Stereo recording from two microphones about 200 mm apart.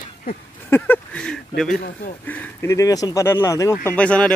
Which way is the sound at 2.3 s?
10° left (ahead or behind).